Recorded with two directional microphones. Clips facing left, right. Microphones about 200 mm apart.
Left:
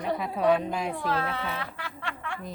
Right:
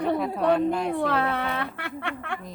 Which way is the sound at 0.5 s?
Centre (ahead or behind).